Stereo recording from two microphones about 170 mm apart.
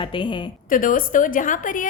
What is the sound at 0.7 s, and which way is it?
A woman's voice, 55° left (ahead or behind).